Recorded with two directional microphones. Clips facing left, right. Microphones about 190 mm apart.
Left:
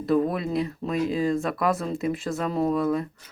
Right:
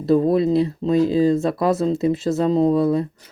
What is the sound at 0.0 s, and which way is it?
Speech, 30° right (ahead or behind).